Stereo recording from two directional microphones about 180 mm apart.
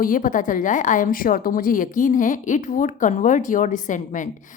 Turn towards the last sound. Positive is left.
turn(degrees=45)  # may be behind; listen again after turning